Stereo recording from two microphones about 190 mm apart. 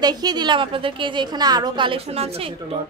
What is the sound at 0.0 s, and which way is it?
A woman's voice, 20° right (ahead or behind).